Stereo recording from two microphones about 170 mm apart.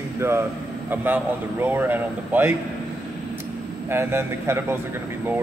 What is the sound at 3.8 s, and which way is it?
Speech, 15° right (ahead or behind).